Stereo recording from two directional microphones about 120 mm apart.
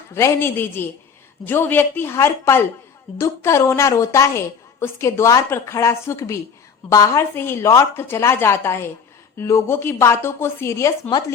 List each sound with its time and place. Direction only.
0.1 s a woman's voice: 20° left (ahead or behind)